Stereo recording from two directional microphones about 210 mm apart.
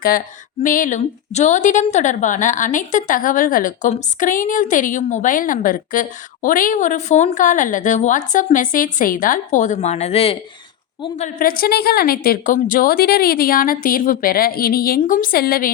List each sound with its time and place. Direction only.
0.6 s a woman's voice: 40° left (ahead or behind)
11.3 s a woman's voice: 45° left (ahead or behind)